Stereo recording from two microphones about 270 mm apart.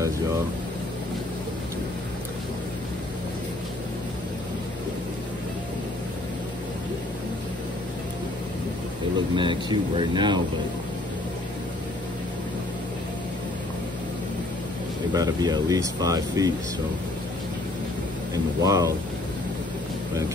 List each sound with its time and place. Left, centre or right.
9.3 s speech: centre
15.1 s speech: centre
18.3 s speech: centre